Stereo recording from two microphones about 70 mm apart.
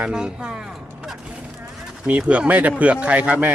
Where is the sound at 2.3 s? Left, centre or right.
Right.